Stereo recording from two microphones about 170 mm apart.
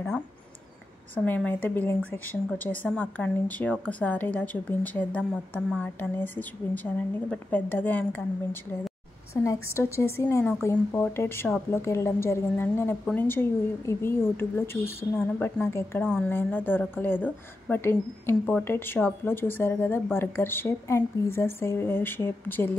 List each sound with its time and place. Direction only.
1.1 s a woman's voice: 10° left (ahead or behind)